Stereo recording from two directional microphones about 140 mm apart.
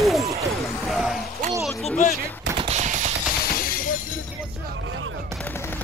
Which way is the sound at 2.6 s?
55° right (ahead or behind).